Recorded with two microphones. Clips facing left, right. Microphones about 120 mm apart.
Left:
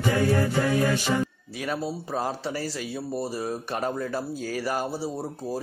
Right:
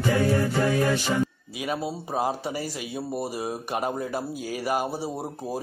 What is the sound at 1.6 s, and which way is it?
Speech, 15° right (ahead or behind).